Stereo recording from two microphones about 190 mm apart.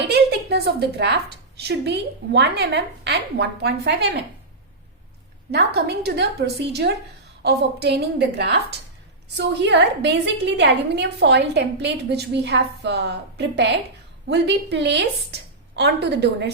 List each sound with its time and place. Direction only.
0.0 s a woman's voice: 60° right (ahead or behind)
5.5 s a woman's voice: 60° right (ahead or behind)
9.6 s a woman's voice: 65° right (ahead or behind)